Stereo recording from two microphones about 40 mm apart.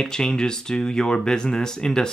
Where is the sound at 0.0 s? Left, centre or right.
Centre.